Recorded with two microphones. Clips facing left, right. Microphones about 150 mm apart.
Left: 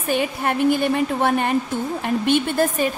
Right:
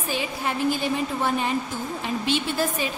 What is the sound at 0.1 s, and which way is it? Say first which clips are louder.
A woman's voice: left 7 dB; 55° left (ahead or behind).